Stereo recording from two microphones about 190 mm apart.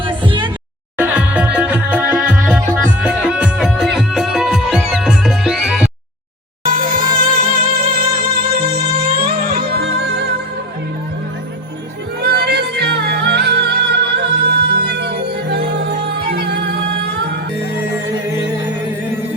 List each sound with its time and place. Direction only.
0.0 s music: 25° right (ahead or behind)
0.9 s music: 5° right (ahead or behind)
6.7 s music: 45° right (ahead or behind)
12.2 s music: 55° right (ahead or behind)